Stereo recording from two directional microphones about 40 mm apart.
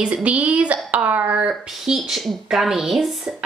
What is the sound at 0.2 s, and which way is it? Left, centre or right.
A woman's voice, right.